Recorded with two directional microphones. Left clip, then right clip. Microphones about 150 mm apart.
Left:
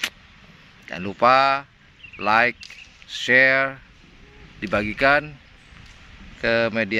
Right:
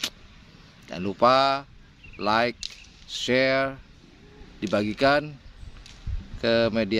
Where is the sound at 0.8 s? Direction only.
10° right (ahead or behind).